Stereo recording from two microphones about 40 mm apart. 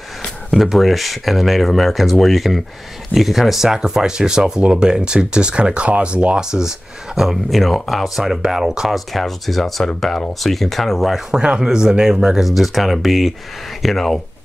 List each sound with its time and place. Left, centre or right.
0.6 s speech: centre; by 6.4 s right
6.4 s speech: centre
7.5 s speech: centre
8.9 s speech: centre
11.3 s speech: centre